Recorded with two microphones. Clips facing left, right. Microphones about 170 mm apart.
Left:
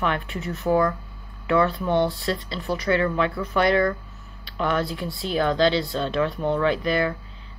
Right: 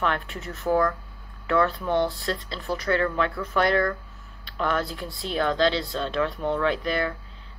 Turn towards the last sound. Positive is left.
turn(degrees=0)  # may be behind; listen again after turning